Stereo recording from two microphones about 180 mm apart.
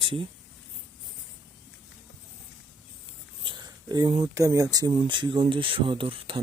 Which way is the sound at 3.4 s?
25° right (ahead or behind).